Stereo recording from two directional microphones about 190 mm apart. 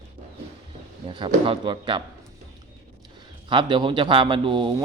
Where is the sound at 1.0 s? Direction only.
25° right (ahead or behind).